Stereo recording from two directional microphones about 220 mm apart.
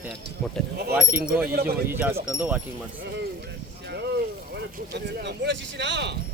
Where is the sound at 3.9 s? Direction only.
50° right (ahead or behind).